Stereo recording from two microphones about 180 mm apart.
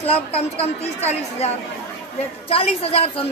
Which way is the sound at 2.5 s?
35° left (ahead or behind).